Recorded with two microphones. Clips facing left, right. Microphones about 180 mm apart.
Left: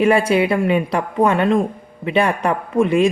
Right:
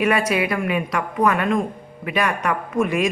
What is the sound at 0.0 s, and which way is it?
A woman's voice, 30° left (ahead or behind).